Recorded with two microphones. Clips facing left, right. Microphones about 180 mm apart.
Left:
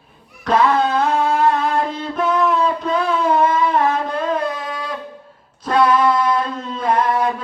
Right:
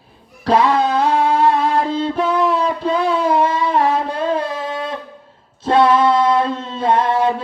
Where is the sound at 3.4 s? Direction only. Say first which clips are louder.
Even; 30° right (ahead or behind).